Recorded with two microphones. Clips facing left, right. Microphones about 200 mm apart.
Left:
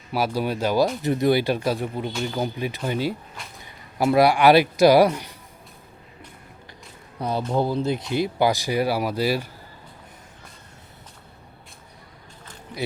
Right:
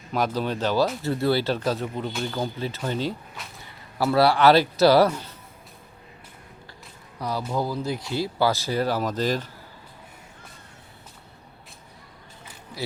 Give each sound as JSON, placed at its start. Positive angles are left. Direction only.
{"t": 0.1, "sound": "speech", "side_deg": 10}
{"t": 7.2, "sound": "speech", "side_deg": 25}